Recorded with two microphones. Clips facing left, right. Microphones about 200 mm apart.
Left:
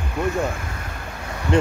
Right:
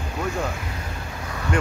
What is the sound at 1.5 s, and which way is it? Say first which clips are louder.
Speech: left 6 dB; 25° left (ahead or behind).